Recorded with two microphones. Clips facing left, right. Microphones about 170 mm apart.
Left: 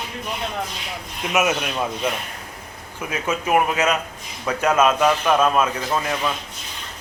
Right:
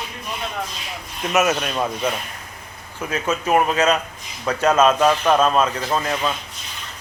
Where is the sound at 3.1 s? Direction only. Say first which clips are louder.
Right 1 dB; 10° left (ahead or behind).